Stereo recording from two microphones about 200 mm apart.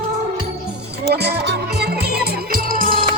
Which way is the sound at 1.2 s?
55° right (ahead or behind).